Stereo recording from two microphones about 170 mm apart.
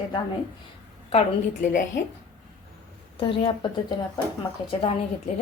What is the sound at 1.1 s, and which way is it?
Speech, 40° left (ahead or behind).